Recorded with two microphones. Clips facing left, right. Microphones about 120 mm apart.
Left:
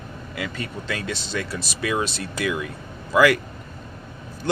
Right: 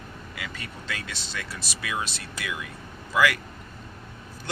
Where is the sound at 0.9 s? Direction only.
40° left (ahead or behind).